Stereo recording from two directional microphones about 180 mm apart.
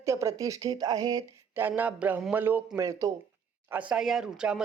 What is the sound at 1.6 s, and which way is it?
Speech, 10° right (ahead or behind).